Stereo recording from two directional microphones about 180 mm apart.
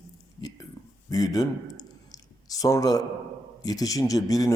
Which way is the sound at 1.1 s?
20° left (ahead or behind).